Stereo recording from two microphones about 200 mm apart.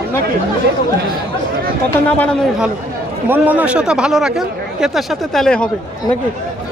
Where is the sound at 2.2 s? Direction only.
Centre (ahead or behind).